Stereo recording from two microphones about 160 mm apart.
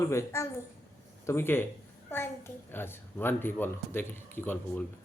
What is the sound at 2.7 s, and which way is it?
Speech, 15° left (ahead or behind).